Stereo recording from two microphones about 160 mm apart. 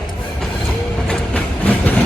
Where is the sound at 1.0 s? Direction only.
5° left (ahead or behind).